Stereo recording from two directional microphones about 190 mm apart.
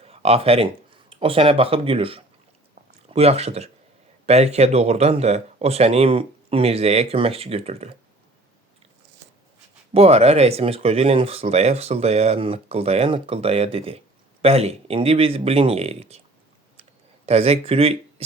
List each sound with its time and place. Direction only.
0.0 s speech: 30° right (ahead or behind)
9.9 s speech: 30° right (ahead or behind)
17.2 s speech: 30° right (ahead or behind)